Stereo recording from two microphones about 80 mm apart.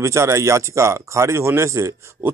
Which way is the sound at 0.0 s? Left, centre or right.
Right.